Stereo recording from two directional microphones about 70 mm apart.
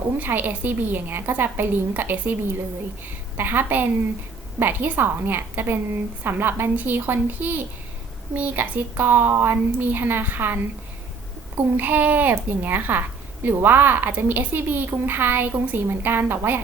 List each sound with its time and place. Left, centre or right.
0.2 s a woman's voice: right